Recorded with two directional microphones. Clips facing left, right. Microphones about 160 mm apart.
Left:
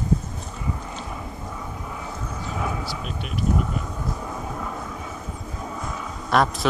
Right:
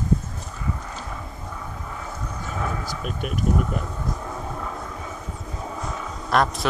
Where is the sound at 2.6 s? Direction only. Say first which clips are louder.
Even; 15° left (ahead or behind).